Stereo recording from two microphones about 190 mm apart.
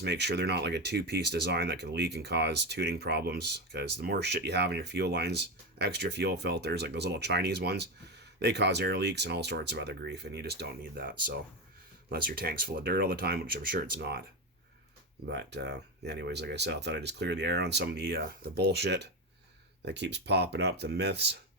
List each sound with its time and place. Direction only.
0.0 s speech: 60° right (ahead or behind)
15.3 s speech: 65° right (ahead or behind)